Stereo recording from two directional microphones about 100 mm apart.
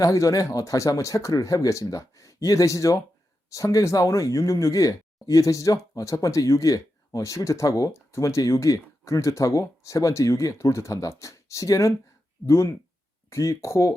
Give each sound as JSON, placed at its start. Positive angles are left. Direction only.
{"t": 0.0, "sound": "speech", "side_deg": 35}